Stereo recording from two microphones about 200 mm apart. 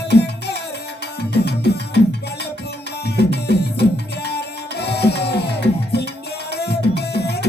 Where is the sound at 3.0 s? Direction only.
55° left (ahead or behind).